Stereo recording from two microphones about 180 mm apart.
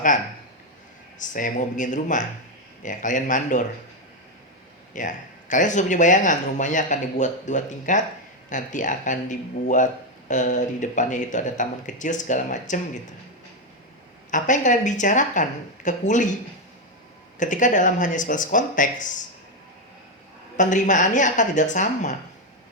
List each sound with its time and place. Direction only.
1.2 s speech: 45° left (ahead or behind)
4.9 s speech: 45° left (ahead or behind)
14.3 s speech: 45° left (ahead or behind)
17.4 s speech: 45° left (ahead or behind)
20.6 s speech: 45° left (ahead or behind)